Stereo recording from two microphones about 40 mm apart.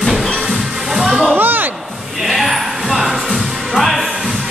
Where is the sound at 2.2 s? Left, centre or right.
Centre.